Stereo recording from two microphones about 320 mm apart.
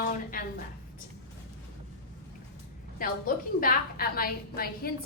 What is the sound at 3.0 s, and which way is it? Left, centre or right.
A woman's voice, left.